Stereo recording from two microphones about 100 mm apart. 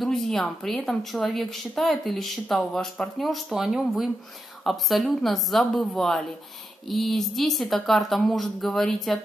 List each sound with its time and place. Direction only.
0.0 s a woman's voice: 5° left (ahead or behind)